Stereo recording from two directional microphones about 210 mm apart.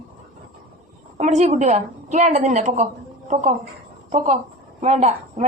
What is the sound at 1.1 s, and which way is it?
A woman's voice, 35° right (ahead or behind).